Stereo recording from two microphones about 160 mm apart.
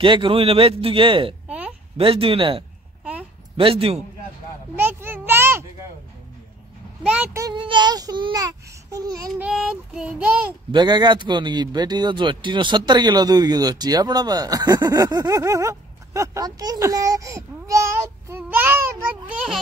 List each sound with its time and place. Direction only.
0.0 s a man's voice: 30° right (ahead or behind)
3.0 s a sound: 10° right (ahead or behind)
3.5 s a man's voice: 35° right (ahead or behind)
4.7 s a sound: 15° right (ahead or behind)
7.3 s a man's voice: 25° right (ahead or behind)
9.3 s child singing: 5° right (ahead or behind)
10.7 s a man's voice: 25° right (ahead or behind)